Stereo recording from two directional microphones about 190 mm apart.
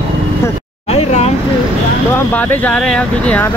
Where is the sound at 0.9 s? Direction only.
35° left (ahead or behind).